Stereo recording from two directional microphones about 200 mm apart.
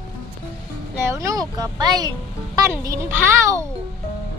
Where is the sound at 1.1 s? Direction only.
15° right (ahead or behind).